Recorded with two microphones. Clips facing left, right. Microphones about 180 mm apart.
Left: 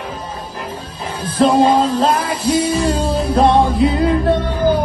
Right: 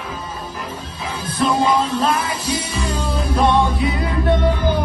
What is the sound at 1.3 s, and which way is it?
Music, 25° left (ahead or behind).